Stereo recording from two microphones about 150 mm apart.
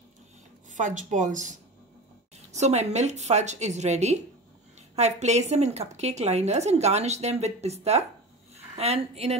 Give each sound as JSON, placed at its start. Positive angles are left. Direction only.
{"t": 0.7, "sound": "a woman's voice", "side_deg": -55}